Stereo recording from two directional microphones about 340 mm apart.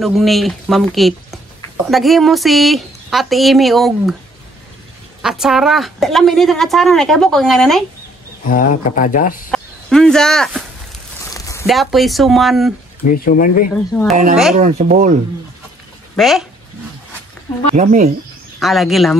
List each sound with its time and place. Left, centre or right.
0.0 s speech: centre
5.2 s speech: centre
8.5 s speech: left
9.5 s speech: centre
11.3 s a sound: centre
11.6 s speech: centre
13.0 s speech: left
13.7 s speech: centre
14.5 s speech: centre
16.2 s speech: centre
17.7 s speech: right
18.6 s speech: centre